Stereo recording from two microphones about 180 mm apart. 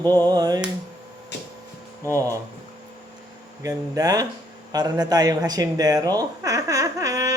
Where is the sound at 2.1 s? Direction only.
20° right (ahead or behind).